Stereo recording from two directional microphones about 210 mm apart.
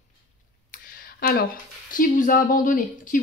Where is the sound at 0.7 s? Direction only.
45° left (ahead or behind).